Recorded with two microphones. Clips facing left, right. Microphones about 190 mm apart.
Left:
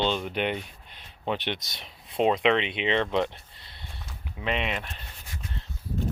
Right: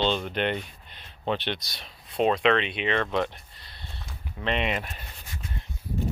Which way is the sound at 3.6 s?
25° left (ahead or behind).